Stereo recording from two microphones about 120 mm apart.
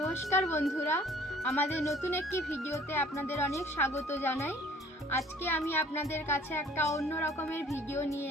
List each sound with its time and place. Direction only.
0.3 s a child's voice: 25° left (ahead or behind)